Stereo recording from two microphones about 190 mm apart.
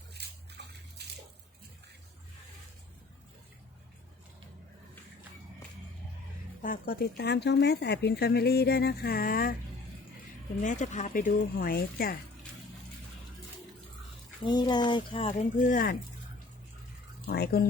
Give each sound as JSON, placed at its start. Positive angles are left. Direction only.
{"t": 0.1, "sound": "a sound", "side_deg": -60}
{"t": 6.6, "sound": "speech", "side_deg": 50}
{"t": 10.6, "sound": "speech", "side_deg": 40}
{"t": 14.4, "sound": "speech", "side_deg": 25}
{"t": 15.3, "sound": "speech", "side_deg": 40}
{"t": 17.2, "sound": "speech", "side_deg": 55}